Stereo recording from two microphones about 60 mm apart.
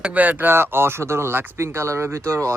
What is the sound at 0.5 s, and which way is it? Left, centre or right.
Speech, right.